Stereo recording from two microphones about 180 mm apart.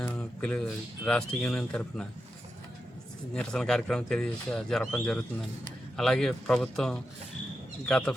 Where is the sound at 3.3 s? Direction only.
5° left (ahead or behind).